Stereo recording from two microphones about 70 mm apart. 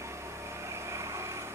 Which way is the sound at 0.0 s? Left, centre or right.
Right.